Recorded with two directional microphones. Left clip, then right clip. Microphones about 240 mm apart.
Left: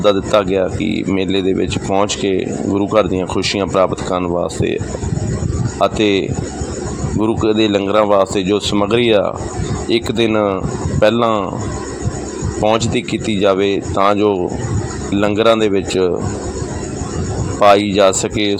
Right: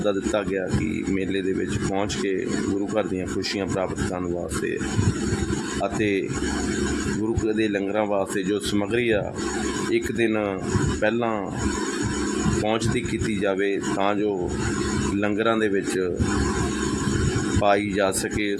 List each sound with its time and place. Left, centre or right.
0.0 s speech: left
5.8 s speech: left
7.5 s speech: left
12.6 s speech: left
17.6 s speech: left